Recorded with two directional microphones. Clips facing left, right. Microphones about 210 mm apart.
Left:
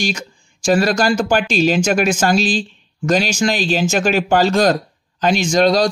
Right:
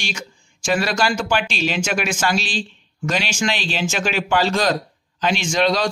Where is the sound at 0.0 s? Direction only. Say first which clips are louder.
Left 9 dB; 35° left (ahead or behind).